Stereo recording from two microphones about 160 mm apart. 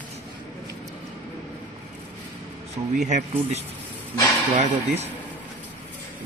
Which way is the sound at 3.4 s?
40° right (ahead or behind).